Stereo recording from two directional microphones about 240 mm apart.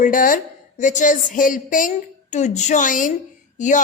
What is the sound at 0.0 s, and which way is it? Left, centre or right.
A woman's voice, left.